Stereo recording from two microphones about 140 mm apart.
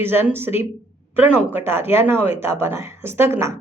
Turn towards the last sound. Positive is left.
turn(degrees=-20)  # may be behind; listen again after turning